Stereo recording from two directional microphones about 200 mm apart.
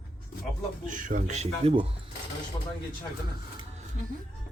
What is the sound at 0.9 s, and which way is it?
Speech, 40° right (ahead or behind).